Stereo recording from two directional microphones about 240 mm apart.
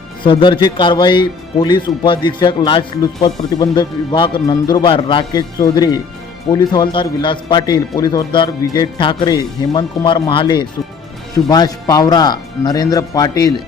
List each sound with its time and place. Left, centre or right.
0.2 s a man's voice: left